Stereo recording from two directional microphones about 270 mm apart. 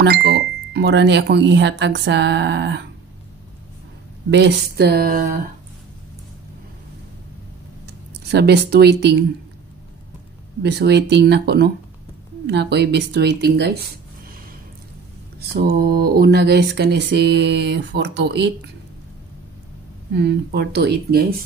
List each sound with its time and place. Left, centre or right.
0.0 s speech: right
4.3 s speech: right
7.8 s speech: right
10.6 s speech: right
15.5 s speech: right
20.2 s speech: right